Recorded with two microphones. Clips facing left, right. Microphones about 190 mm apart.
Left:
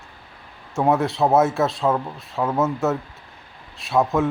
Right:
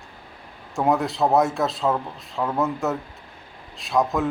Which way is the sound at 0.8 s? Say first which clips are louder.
Left 2 dB; centre (ahead or behind).